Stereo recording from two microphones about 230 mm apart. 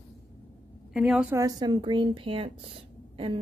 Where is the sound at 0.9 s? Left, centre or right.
Centre.